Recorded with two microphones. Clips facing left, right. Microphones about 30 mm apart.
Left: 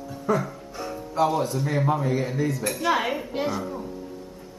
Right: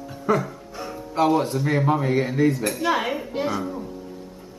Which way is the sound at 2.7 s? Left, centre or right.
Centre.